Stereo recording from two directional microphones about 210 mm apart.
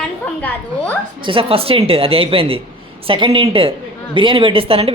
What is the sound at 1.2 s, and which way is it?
Speech, 25° right (ahead or behind).